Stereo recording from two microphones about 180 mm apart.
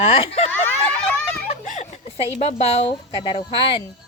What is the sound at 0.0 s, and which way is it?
Speech, 35° left (ahead or behind).